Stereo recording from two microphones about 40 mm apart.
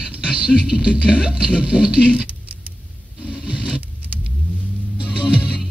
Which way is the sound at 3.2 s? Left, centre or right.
Right.